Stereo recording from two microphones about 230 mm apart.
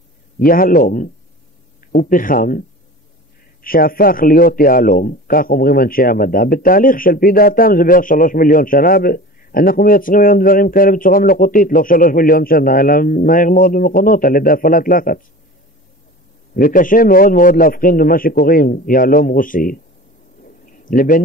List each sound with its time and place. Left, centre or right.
0.5 s a man's voice: left
3.6 s a man's voice: left
16.5 s a man's voice: left
20.4 s a sound: left